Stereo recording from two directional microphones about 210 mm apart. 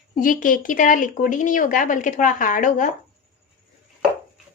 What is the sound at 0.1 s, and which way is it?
Speech, 40° left (ahead or behind).